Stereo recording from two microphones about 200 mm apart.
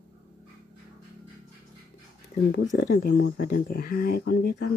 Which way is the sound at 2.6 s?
60° left (ahead or behind).